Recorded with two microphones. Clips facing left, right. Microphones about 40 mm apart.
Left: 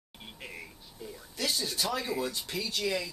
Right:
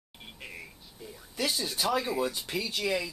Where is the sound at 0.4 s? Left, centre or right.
Centre.